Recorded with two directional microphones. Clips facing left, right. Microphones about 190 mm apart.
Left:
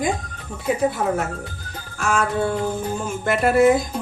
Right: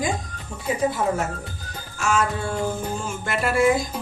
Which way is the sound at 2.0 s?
60° left (ahead or behind).